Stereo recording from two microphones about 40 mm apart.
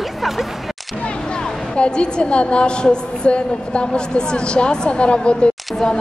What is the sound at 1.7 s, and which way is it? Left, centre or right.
A woman's voice, left.